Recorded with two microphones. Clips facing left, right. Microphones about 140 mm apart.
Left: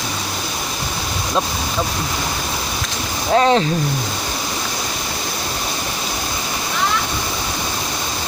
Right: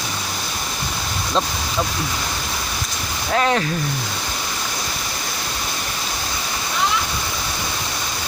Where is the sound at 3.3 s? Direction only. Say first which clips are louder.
Left 5 dB; 25° left (ahead or behind).